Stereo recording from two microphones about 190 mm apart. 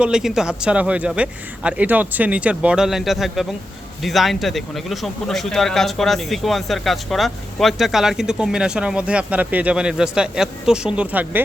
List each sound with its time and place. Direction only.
0.0 s speech: 5° right (ahead or behind)